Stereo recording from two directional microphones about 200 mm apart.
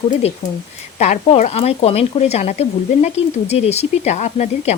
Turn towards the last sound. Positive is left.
turn(degrees=35)  # may be behind; listen again after turning